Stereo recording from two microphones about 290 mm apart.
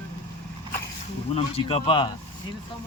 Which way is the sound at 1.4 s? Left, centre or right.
Left.